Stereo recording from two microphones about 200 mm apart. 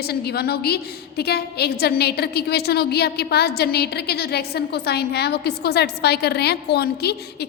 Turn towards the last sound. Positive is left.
turn(degrees=55)  # may be behind; listen again after turning